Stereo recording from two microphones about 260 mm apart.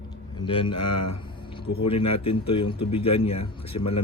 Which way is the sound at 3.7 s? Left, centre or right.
Left.